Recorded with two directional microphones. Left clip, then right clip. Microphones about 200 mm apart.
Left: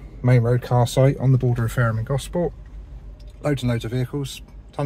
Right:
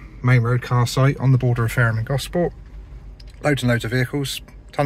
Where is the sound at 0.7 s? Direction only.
65° right (ahead or behind).